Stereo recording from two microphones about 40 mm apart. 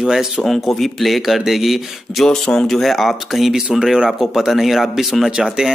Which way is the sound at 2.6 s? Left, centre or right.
Centre.